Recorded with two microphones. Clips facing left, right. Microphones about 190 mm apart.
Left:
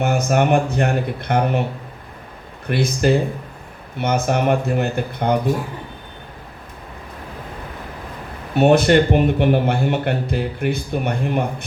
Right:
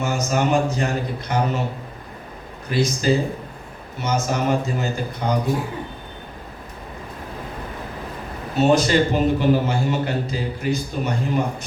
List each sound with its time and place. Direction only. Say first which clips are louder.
0.0 s a man's voice: left 4 dB; 60° left (ahead or behind)
2.6 s a man's voice: left 2 dB; 60° left (ahead or behind)
8.5 s a man's voice: left 4 dB; 60° left (ahead or behind)